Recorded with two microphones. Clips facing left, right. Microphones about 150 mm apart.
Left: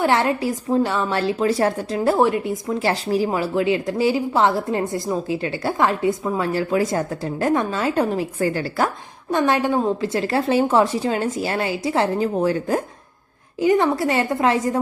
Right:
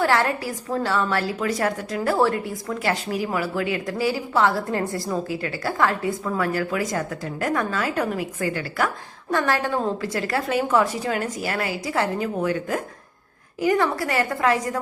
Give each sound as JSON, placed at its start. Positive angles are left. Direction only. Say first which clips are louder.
{"t": 0.0, "sound": "a woman's voice", "louder": "left 2 dB", "side_deg": 20}
{"t": 9.3, "sound": "a woman's voice", "louder": "left 4 dB", "side_deg": 20}